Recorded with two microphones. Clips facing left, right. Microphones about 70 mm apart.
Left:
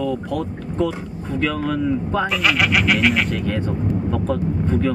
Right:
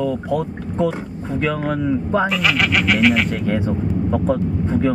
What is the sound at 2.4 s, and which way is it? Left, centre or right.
Speech, centre.